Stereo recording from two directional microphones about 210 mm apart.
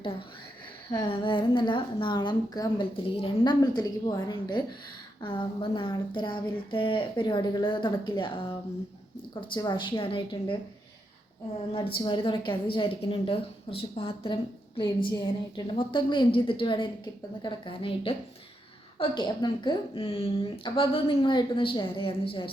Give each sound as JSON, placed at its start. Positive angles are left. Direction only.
{"t": 0.9, "sound": "a woman's voice", "side_deg": 20}
{"t": 11.7, "sound": "a woman's voice", "side_deg": 25}